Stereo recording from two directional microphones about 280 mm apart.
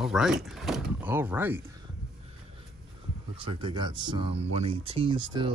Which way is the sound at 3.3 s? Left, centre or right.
Centre.